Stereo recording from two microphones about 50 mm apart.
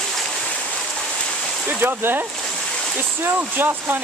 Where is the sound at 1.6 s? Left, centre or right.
Right.